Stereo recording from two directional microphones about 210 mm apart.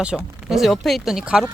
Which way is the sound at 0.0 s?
5° right (ahead or behind).